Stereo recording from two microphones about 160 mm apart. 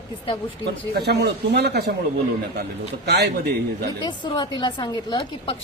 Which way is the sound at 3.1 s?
90° right.